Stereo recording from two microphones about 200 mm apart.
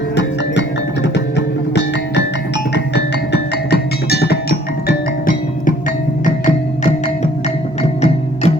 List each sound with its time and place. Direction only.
1.0 s music: 60° left (ahead or behind); by 8.5 s 35° left (ahead or behind)